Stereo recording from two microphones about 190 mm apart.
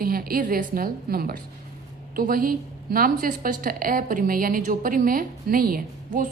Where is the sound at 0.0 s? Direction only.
50° right (ahead or behind).